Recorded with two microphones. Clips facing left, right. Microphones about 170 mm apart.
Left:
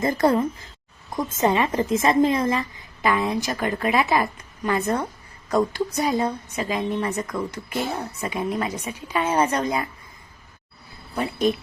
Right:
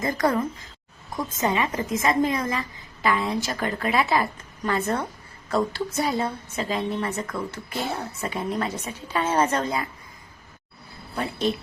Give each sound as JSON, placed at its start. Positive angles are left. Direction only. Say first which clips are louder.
{"t": 0.0, "sound": "a woman's voice", "louder": "left 4 dB", "side_deg": 25}